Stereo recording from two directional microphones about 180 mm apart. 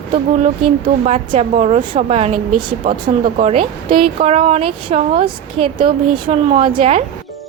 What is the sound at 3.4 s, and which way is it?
Speech, 35° right (ahead or behind).